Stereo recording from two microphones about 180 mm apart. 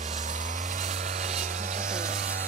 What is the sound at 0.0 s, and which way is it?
Vehicle, 40° right (ahead or behind).